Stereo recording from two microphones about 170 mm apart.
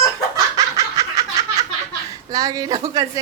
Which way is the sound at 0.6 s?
20° right (ahead or behind).